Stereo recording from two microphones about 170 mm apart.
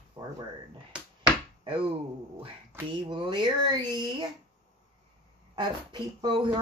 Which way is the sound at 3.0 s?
30° right (ahead or behind).